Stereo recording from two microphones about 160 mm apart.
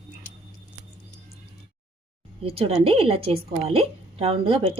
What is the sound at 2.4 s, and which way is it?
A woman's voice, 35° right (ahead or behind).